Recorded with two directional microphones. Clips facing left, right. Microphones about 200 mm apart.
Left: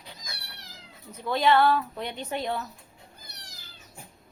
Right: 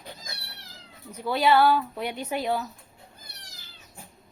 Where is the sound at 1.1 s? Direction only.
10° right (ahead or behind).